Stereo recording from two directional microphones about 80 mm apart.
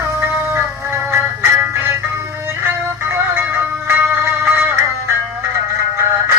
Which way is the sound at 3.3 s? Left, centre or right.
Right.